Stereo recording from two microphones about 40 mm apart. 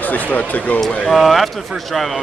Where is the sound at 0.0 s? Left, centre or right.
Left.